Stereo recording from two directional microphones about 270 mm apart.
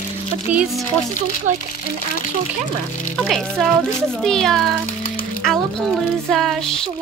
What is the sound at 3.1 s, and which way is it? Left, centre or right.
Speech, centre.